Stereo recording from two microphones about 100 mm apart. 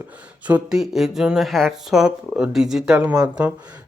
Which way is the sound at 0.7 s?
5° right (ahead or behind).